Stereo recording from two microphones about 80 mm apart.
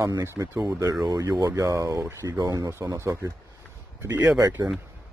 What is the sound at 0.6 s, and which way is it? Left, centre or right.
Speech, right.